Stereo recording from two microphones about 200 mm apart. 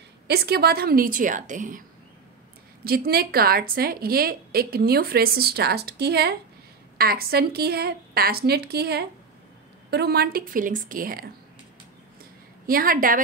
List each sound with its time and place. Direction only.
0.3 s a woman's voice: 50° right (ahead or behind)
2.8 s a woman's voice: 50° right (ahead or behind)
12.6 s a woman's voice: 45° right (ahead or behind)